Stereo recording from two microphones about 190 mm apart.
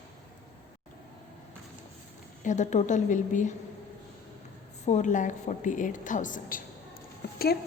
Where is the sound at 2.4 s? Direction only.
40° left (ahead or behind).